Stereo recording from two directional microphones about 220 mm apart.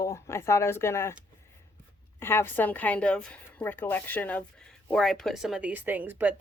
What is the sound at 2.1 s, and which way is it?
A woman's voice, 10° left (ahead or behind).